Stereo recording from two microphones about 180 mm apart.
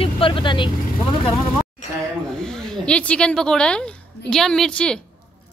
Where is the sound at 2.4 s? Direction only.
5° left (ahead or behind).